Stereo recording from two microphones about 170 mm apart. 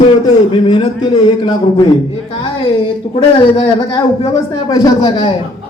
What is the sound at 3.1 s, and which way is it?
Speech, 35° left (ahead or behind).